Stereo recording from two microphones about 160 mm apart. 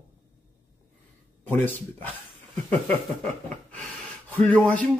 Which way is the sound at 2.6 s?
10° left (ahead or behind).